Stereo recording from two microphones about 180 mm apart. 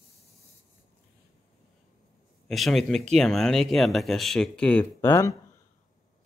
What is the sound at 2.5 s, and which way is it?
Speech, centre (ahead or behind).